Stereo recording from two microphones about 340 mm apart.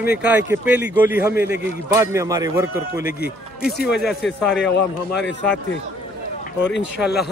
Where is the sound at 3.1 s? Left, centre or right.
Left.